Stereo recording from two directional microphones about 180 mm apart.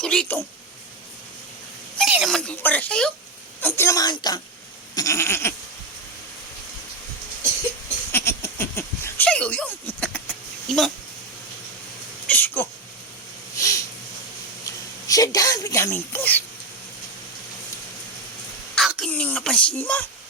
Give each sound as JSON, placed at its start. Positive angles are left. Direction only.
{"t": 0.0, "sound": "speech", "side_deg": 5}
{"t": 2.0, "sound": "speech", "side_deg": -5}
{"t": 4.9, "sound": "goat", "side_deg": 15}
{"t": 8.1, "sound": "a sound", "side_deg": 15}
{"t": 10.7, "sound": "speech", "side_deg": 0}
{"t": 12.3, "sound": "a sound", "side_deg": 10}
{"t": 14.6, "sound": "speech", "side_deg": 20}
{"t": 18.7, "sound": "speech", "side_deg": 0}